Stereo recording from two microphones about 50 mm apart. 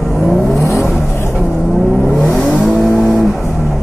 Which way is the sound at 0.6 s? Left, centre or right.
Left.